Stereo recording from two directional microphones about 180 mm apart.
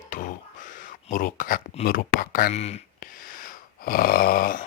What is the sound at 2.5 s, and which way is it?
Speech, 35° left (ahead or behind).